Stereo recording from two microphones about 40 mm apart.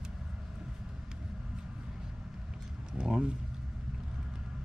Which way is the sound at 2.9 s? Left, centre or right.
Centre.